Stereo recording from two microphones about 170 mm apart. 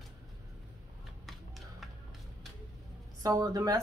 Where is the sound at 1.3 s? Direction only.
Centre (ahead or behind).